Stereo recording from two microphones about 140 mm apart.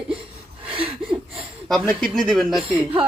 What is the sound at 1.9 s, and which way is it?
Speech, centre (ahead or behind).